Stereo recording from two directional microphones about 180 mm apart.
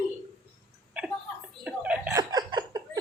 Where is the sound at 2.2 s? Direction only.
20° right (ahead or behind).